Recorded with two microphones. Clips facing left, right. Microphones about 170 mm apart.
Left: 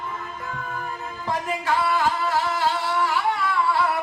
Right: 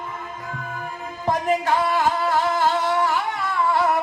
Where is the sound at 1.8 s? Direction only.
45° right (ahead or behind).